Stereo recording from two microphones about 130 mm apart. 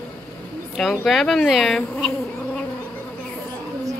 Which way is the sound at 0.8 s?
Centre (ahead or behind).